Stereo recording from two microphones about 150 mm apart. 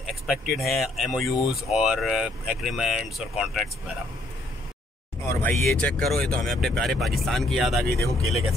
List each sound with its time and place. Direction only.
0.1 s speech: centre (ahead or behind)
5.2 s speech: 15° left (ahead or behind)
5.6 s speech: 5° left (ahead or behind)